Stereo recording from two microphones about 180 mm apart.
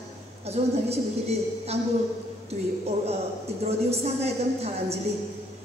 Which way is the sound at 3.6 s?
35° right (ahead or behind).